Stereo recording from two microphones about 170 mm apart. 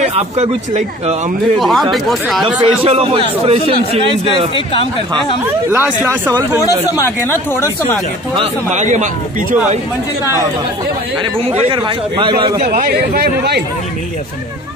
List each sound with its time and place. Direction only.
0.0 s a man's voice: 35° right (ahead or behind)
1.6 s speech: centre (ahead or behind)
2.4 s a man's voice: 35° right (ahead or behind)
5.4 s speech: 10° right (ahead or behind)
6.9 s speech: 15° left (ahead or behind)
8.7 s speech: 45° right (ahead or behind)
11.5 s a man's voice: 30° right (ahead or behind)
12.6 s speech: 65° right (ahead or behind)